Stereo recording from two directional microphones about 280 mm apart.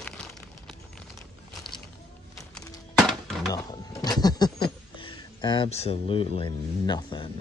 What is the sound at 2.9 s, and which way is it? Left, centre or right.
Breaking, centre.